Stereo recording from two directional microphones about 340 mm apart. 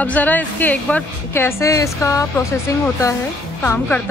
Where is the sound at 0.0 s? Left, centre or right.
Centre.